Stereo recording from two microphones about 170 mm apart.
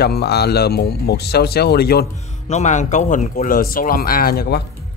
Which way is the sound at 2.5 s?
45° left (ahead or behind).